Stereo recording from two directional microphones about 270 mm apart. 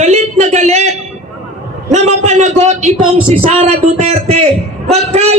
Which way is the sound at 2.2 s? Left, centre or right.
Right.